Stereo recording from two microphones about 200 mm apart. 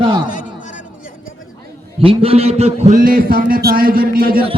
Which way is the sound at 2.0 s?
25° right (ahead or behind).